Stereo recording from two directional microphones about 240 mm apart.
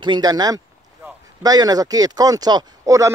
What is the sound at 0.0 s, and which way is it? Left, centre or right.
Speech, centre.